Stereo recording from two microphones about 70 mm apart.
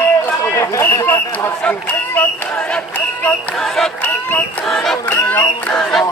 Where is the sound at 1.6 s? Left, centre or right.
Left.